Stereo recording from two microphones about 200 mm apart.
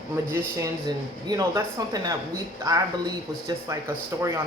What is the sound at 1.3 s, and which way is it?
Speech, 15° right (ahead or behind).